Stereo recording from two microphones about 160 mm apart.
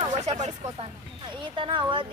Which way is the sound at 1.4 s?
30° right (ahead or behind).